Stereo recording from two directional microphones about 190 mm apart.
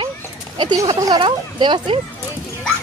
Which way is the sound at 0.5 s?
20° right (ahead or behind).